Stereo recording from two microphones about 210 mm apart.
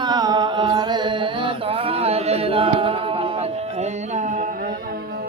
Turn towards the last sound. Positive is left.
turn(degrees=-35)  # may be behind; listen again after turning